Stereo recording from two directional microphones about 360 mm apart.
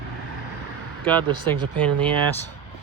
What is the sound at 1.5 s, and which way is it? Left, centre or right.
Speech, centre.